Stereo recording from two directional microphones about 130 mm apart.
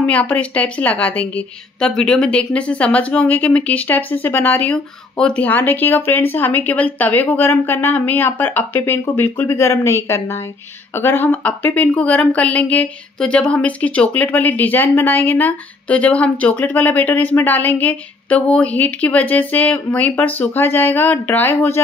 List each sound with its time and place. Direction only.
0.0 s speech: 10° left (ahead or behind)